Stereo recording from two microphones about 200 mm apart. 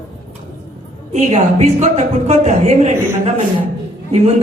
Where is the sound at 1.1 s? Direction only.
30° right (ahead or behind).